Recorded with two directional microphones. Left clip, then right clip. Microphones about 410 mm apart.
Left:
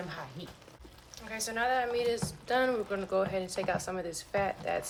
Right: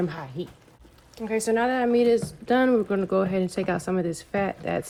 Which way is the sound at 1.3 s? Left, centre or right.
Centre.